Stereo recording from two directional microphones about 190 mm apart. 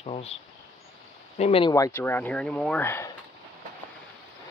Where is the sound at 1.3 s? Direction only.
30° left (ahead or behind).